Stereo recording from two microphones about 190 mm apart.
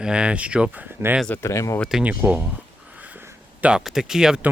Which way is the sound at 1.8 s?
5° right (ahead or behind).